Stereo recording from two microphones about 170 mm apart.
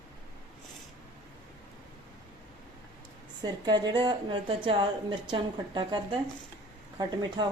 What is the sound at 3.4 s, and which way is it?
A woman's voice, 25° right (ahead or behind).